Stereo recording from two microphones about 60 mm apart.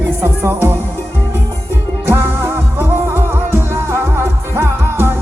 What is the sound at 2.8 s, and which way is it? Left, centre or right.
Music, right.